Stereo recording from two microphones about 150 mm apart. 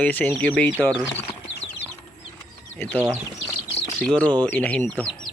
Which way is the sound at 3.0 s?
5° right (ahead or behind).